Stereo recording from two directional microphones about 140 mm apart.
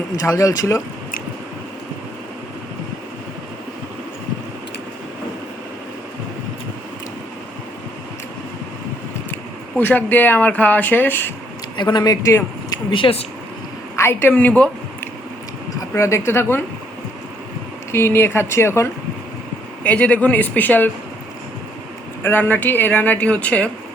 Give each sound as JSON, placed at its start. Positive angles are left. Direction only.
{"t": 0.2, "sound": "speech", "side_deg": 25}
{"t": 9.3, "sound": "speech", "side_deg": 10}
{"t": 11.8, "sound": "speech", "side_deg": 30}
{"t": 12.7, "sound": "speech", "side_deg": 35}
{"t": 13.9, "sound": "a woman's voice", "side_deg": 20}
{"t": 17.9, "sound": "speech", "side_deg": 15}
{"t": 22.2, "sound": "speech", "side_deg": 15}